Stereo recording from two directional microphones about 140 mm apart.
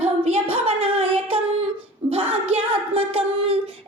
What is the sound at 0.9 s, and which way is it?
Singing, 40° right (ahead or behind).